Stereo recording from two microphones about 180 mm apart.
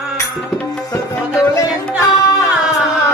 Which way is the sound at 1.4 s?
20° left (ahead or behind).